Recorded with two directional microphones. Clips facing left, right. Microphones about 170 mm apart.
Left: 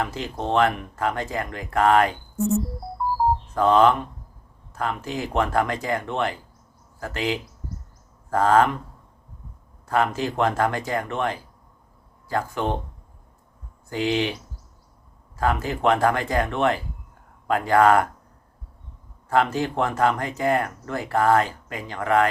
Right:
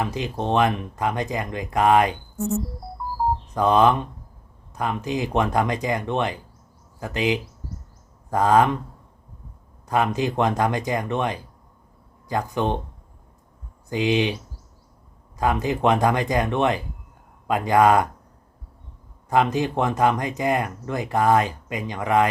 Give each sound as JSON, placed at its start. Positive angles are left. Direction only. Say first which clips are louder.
{"t": 0.0, "sound": "speech", "louder": "right 2 dB", "side_deg": -15}
{"t": 3.5, "sound": "speech", "louder": "even", "side_deg": -15}
{"t": 9.8, "sound": "speech", "louder": "right 1 dB", "side_deg": -15}
{"t": 13.9, "sound": "speech", "louder": "right 2 dB", "side_deg": -15}
{"t": 15.4, "sound": "speech", "louder": "right 2 dB", "side_deg": -15}
{"t": 19.3, "sound": "speech", "louder": "right 1 dB", "side_deg": -15}